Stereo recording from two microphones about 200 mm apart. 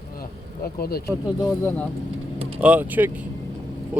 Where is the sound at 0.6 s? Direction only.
50° left (ahead or behind).